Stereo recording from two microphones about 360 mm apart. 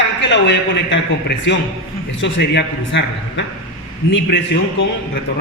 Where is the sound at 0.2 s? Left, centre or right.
Left.